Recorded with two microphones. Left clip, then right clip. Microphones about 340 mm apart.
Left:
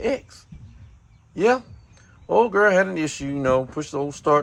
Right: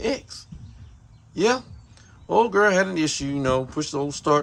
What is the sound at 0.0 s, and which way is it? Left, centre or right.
Speech, centre.